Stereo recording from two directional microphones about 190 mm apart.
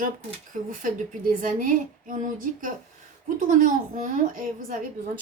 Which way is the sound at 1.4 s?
45° right (ahead or behind).